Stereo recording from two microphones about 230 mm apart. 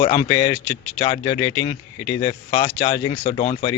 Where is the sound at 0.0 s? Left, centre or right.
Left.